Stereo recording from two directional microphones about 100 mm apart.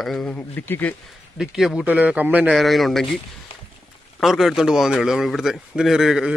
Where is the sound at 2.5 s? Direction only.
Centre (ahead or behind).